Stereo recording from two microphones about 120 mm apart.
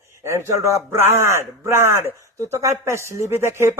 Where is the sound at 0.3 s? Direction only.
25° right (ahead or behind).